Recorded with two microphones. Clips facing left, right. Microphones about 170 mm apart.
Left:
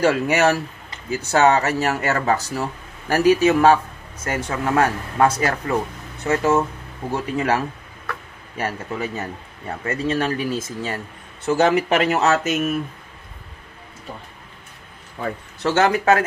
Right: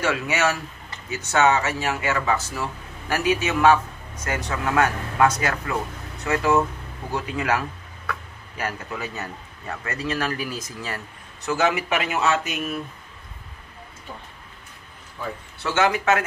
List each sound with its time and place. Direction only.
0.0 s a man's voice: 35° left (ahead or behind)
15.6 s speech: 40° left (ahead or behind)